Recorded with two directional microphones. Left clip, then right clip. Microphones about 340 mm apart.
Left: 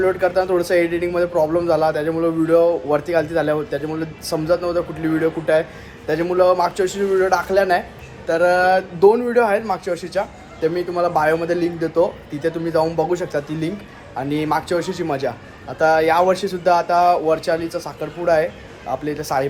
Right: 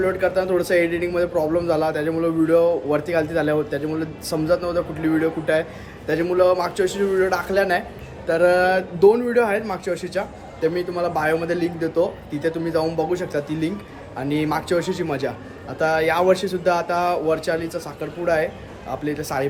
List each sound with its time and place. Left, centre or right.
0.0 s a man's voice: centre